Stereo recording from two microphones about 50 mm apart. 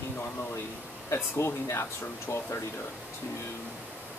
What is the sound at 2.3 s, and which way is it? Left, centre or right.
Speech, left.